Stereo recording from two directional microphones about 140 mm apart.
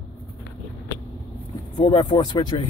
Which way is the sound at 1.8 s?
30° left (ahead or behind).